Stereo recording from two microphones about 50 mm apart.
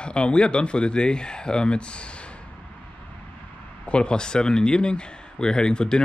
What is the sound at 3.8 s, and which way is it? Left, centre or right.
Speech, centre.